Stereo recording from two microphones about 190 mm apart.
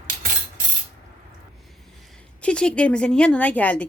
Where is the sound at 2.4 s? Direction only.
5° left (ahead or behind).